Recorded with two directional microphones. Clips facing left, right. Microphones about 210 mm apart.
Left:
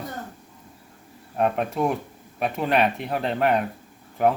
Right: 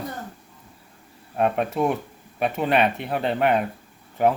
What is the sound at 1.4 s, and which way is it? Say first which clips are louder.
Speech: right 1 dB; centre (ahead or behind).